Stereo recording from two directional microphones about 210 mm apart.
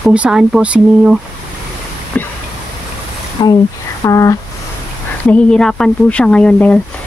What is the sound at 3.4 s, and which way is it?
Speech, 20° left (ahead or behind).